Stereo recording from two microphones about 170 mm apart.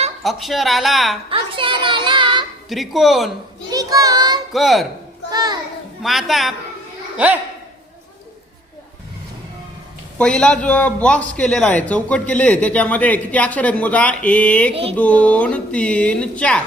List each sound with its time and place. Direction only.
0.2 s a woman's voice: centre (ahead or behind)
1.3 s child singing: 30° right (ahead or behind)
2.6 s a woman's voice: centre (ahead or behind)
3.7 s child singing: 20° right (ahead or behind)
4.5 s a woman's voice: centre (ahead or behind)
5.3 s children playing: 25° right (ahead or behind)
6.0 s a woman's voice: centre (ahead or behind)
10.2 s a man's voice: 5° left (ahead or behind)
14.7 s a sound: 35° right (ahead or behind)
14.9 s a man's voice: 10° left (ahead or behind)